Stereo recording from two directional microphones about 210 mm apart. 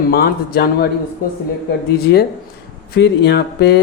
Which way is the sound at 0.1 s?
50° left (ahead or behind).